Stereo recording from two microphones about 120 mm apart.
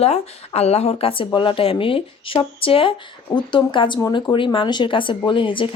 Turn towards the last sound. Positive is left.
turn(degrees=45)  # may be behind; listen again after turning